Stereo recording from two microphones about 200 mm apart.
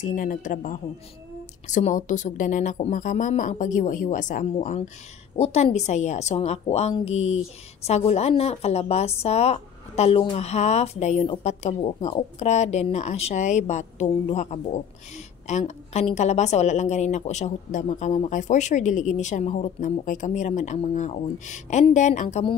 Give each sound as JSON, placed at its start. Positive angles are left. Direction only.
{"t": 0.0, "sound": "a woman's voice", "side_deg": 40}